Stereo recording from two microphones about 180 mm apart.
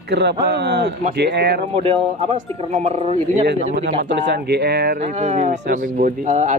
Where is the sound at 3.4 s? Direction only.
70° right (ahead or behind).